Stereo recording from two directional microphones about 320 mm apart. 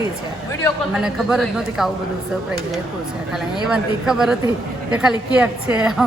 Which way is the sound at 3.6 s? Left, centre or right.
Centre.